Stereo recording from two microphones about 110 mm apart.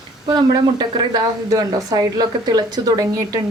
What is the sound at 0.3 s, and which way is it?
Speech, 40° right (ahead or behind).